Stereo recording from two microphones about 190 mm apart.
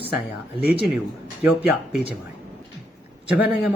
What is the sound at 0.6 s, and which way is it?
Speech, 55° left (ahead or behind).